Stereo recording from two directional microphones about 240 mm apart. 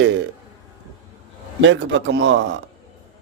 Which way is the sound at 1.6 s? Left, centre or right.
Right.